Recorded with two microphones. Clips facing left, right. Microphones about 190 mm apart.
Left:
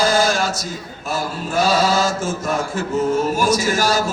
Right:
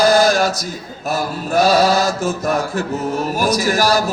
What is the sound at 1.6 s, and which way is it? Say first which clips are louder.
Chant: right 3 dB; 40° right (ahead or behind).